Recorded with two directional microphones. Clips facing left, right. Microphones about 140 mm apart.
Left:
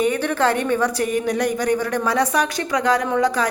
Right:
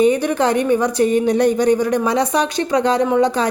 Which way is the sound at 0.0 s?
20° right (ahead or behind).